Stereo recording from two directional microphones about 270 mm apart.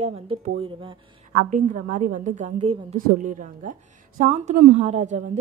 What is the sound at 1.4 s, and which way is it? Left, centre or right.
A woman's voice, right.